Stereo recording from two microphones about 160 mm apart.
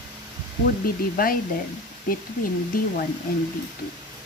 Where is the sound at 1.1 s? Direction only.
65° left (ahead or behind).